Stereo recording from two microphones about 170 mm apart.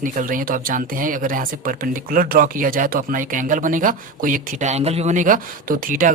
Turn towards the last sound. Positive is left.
turn(degrees=-55)  # may be behind; listen again after turning